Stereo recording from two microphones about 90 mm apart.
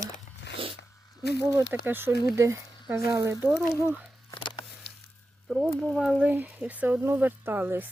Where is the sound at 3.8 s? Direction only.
15° right (ahead or behind).